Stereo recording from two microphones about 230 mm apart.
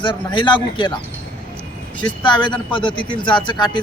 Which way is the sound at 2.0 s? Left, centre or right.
Centre.